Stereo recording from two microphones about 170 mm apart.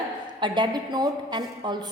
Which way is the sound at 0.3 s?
25° right (ahead or behind).